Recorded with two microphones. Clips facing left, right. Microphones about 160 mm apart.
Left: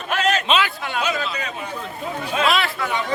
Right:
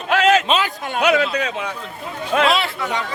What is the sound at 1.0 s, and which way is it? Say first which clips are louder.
Speech: right 8 dB; 75° right (ahead or behind).